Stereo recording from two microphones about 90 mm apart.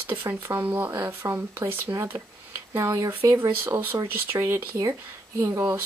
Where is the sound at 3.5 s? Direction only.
25° right (ahead or behind).